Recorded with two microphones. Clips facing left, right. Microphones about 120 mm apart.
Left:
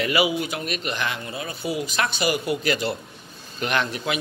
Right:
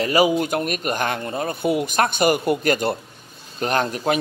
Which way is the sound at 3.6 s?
40° right (ahead or behind).